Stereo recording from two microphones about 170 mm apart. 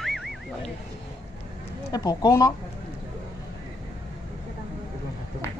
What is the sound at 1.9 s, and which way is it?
Speech, 25° left (ahead or behind).